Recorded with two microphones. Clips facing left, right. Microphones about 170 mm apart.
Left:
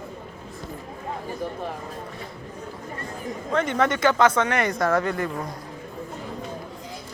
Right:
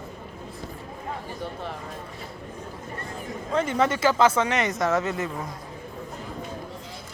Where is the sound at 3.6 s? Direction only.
30° right (ahead or behind).